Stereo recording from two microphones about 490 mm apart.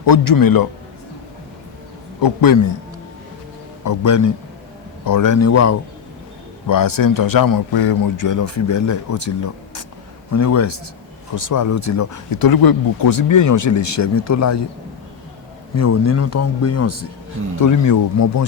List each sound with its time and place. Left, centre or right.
0.0 s speech: left
2.2 s speech: left
3.8 s speech: left
6.7 s speech: left
15.7 s speech: left